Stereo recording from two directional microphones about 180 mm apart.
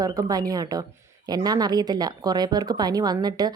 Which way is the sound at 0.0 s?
20° right (ahead or behind).